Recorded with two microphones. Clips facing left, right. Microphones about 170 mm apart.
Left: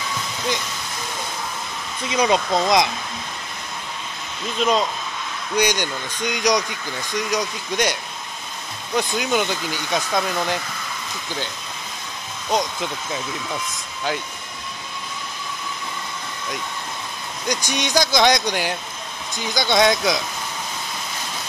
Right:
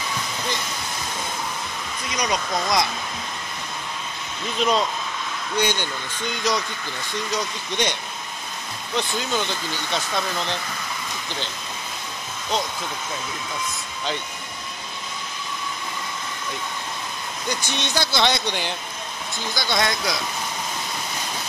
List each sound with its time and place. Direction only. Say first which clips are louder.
2.0 s speech: left 7 dB; 25° left (ahead or behind)
4.6 s speech: left 1 dB; 10° left (ahead or behind)
9.3 s speech: left 4 dB; 15° left (ahead or behind)
17.5 s speech: left 4 dB; 15° left (ahead or behind)